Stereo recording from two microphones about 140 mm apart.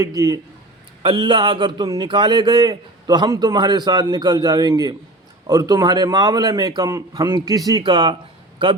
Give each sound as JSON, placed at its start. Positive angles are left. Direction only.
{"t": 0.0, "sound": "a man's voice", "side_deg": -25}